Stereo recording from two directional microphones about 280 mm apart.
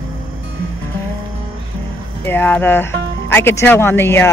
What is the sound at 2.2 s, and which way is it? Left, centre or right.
A woman's voice, centre.